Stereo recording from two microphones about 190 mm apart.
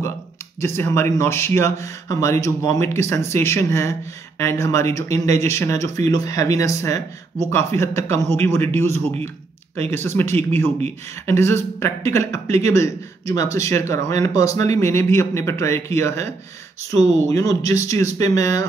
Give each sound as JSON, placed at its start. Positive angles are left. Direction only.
{"t": 0.6, "sound": "speech", "side_deg": 15}